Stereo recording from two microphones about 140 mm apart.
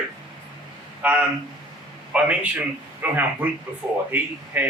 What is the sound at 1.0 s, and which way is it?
A man's voice, 10° right (ahead or behind).